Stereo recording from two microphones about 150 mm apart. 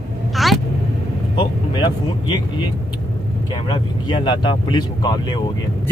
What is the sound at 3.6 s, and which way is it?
Speech, 30° left (ahead or behind).